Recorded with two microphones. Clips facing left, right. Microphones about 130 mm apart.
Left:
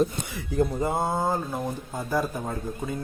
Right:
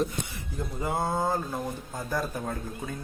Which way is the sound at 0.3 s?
80° left.